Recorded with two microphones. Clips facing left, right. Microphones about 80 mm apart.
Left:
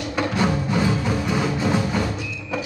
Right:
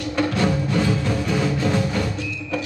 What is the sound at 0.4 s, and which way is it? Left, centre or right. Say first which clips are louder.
Music: left 2 dB; centre.